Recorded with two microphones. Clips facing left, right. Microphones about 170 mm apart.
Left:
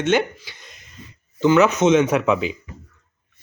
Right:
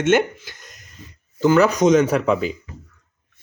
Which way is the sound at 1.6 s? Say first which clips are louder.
Right 1 dB; 35° right (ahead or behind).